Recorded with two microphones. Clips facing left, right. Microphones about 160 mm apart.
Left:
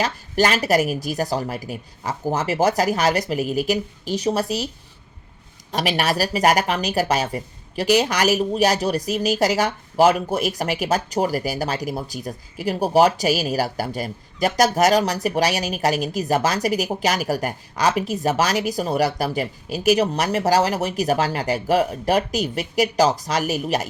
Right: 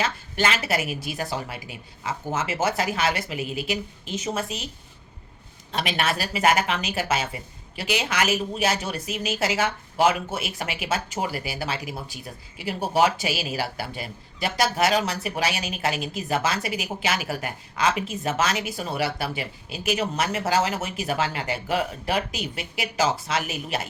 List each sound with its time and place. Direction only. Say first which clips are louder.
0.0 s speech: left 5 dB; 40° left (ahead or behind)
5.7 s speech: left 5 dB; 40° left (ahead or behind)